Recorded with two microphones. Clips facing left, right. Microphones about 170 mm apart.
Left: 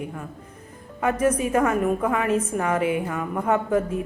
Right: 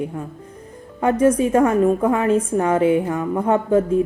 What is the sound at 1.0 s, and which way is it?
A woman's voice, 30° right (ahead or behind).